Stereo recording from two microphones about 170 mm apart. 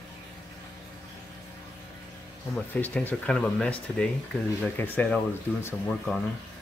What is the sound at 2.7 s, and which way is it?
Speech, 10° left (ahead or behind).